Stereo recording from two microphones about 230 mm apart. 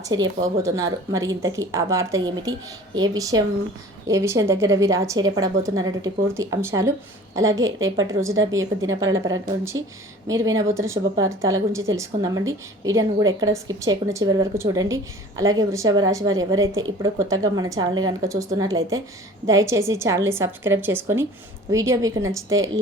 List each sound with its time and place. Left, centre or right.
0.0 s a woman's voice: centre
7.6 s a woman's voice: right
8.4 s a woman's voice: centre
16.4 s a woman's voice: right
16.8 s a woman's voice: centre
22.4 s a woman's voice: right